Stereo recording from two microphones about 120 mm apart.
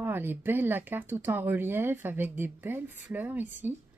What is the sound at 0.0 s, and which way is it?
Speech, 15° right (ahead or behind).